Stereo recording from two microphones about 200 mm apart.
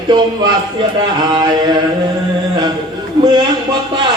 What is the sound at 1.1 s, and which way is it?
Speech, 20° right (ahead or behind).